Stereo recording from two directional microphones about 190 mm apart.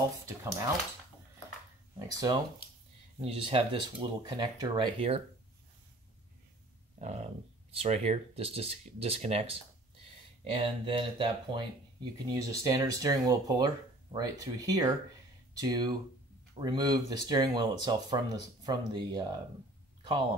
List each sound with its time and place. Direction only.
0.3 s speech: 15° right (ahead or behind)
2.0 s speech: 20° right (ahead or behind)
3.2 s speech: 30° right (ahead or behind)
7.0 s speech: 35° right (ahead or behind)
20.0 s a sound: 25° right (ahead or behind)